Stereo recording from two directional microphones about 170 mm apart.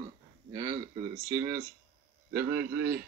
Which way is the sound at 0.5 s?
30° right (ahead or behind).